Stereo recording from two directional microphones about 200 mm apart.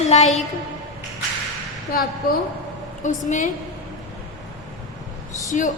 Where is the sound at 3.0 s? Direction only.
40° left (ahead or behind).